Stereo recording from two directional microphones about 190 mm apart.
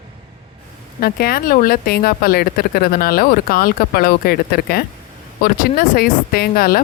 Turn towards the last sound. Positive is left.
turn(degrees=50)  # may be behind; listen again after turning